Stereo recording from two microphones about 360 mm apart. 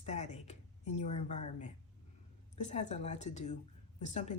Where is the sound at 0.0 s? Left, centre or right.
Centre.